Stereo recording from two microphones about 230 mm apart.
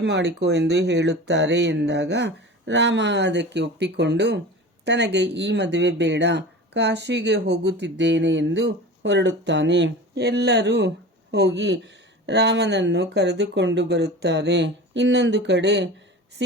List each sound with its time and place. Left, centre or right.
0.0 s speech: right